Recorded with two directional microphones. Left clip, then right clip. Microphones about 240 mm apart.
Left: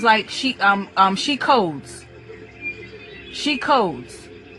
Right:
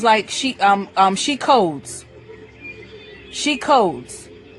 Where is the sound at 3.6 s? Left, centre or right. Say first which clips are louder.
Right 3 dB; right.